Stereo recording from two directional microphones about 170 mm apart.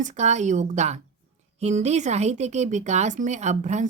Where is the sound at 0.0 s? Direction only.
45° right (ahead or behind).